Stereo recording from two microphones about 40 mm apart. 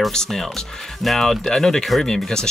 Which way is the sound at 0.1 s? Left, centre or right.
Centre.